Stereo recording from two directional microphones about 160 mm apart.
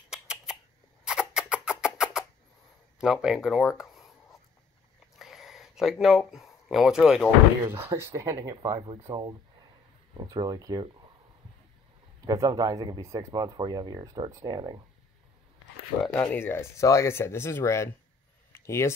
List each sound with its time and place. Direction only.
0.1 s a sound: 5° right (ahead or behind)
1.0 s rodents: 5° right (ahead or behind)
3.0 s speech: 5° right (ahead or behind)
3.7 s a sound: centre (ahead or behind)
5.2 s speech: centre (ahead or behind)
7.7 s speech: 15° right (ahead or behind)
8.7 s speech: 35° right (ahead or behind)
12.3 s speech: 20° right (ahead or behind)
16.2 s speech: 15° left (ahead or behind)
18.5 s a sound: 15° left (ahead or behind)